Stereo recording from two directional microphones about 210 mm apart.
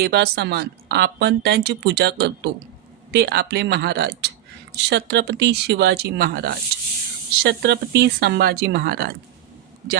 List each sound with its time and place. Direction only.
0.0 s a woman's voice: 50° right (ahead or behind)